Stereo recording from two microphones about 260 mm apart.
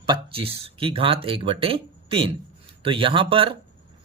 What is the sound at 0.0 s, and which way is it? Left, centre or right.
Speech, centre.